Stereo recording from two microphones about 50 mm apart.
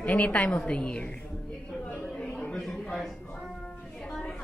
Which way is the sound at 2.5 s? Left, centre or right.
Centre.